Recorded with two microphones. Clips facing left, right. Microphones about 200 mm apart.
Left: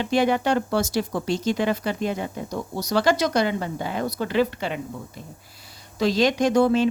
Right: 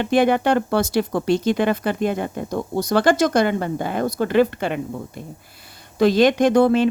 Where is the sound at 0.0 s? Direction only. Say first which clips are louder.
Right 4 dB; 55° right (ahead or behind).